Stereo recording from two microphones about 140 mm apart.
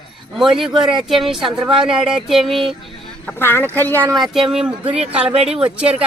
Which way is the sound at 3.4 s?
15° left (ahead or behind).